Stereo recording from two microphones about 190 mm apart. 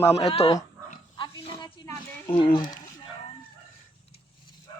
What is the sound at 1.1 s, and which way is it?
Pig, 25° left (ahead or behind).